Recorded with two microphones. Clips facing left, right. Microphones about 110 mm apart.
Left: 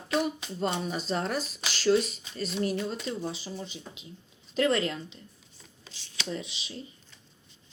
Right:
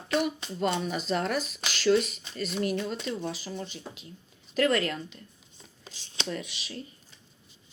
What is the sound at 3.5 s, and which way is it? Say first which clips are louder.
Speech: right 2 dB; 45° right (ahead or behind).